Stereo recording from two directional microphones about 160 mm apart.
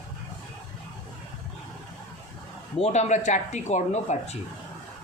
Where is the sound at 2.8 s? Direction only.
45° left (ahead or behind).